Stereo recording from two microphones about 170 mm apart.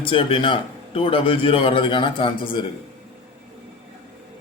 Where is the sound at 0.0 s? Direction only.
30° left (ahead or behind).